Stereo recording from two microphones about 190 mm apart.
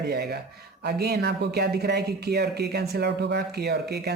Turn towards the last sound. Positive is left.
turn(degrees=-60)  # may be behind; listen again after turning